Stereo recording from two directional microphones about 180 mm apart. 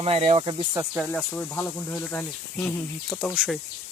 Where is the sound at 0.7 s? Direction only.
10° right (ahead or behind).